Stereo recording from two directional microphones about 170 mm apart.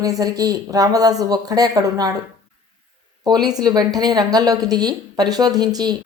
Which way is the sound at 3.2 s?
25° right (ahead or behind).